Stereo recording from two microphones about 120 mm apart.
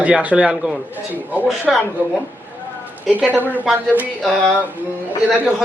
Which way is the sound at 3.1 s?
15° right (ahead or behind).